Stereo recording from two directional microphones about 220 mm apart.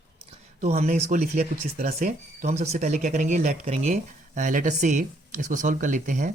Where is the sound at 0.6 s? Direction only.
30° right (ahead or behind).